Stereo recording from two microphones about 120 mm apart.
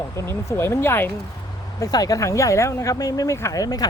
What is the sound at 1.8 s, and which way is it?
Speech, 30° left (ahead or behind).